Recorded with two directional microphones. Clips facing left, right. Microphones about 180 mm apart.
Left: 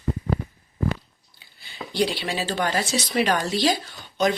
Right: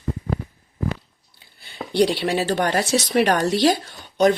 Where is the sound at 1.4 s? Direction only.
55° right (ahead or behind).